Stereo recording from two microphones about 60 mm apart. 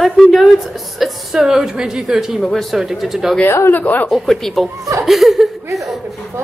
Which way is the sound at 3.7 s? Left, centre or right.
Left.